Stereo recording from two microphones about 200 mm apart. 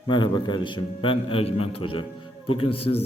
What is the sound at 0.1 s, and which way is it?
A man's voice, 25° left (ahead or behind).